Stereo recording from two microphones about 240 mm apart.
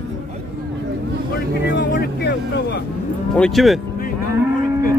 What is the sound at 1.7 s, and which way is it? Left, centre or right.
Vehicle, left.